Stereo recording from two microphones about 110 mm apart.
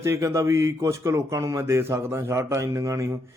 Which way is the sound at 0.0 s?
25° right (ahead or behind).